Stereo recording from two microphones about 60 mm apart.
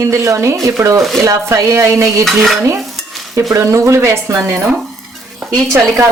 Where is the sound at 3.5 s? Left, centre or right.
Right.